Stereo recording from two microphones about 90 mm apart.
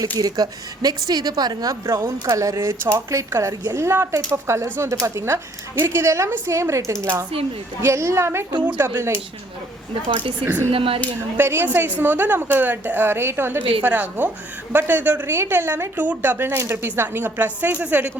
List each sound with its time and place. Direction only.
0.2 s speech: 45° right (ahead or behind)
1.9 s speech: 35° right (ahead or behind)
2.6 s a woman's voice: 30° right (ahead or behind)
8.6 s speech: 15° right (ahead or behind)
10.1 s a woman's voice: 75° right (ahead or behind)
10.7 s speech: 90° right
11.3 s a woman's voice: 25° right (ahead or behind)